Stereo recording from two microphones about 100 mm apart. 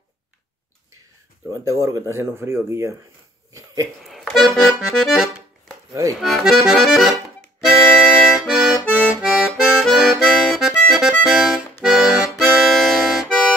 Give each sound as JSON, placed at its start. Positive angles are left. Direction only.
{"t": 1.5, "sound": "speech", "side_deg": -30}
{"t": 4.0, "sound": "accordion", "side_deg": 0}
{"t": 9.2, "sound": "music", "side_deg": -5}
{"t": 10.9, "sound": "accordion", "side_deg": -5}